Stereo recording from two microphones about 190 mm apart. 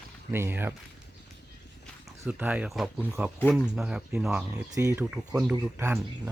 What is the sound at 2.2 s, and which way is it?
Speech, 10° right (ahead or behind).